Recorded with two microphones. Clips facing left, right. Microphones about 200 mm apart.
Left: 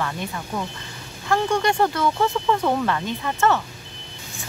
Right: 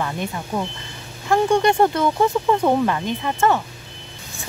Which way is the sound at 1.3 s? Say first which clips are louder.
Right 4 dB; 20° right (ahead or behind).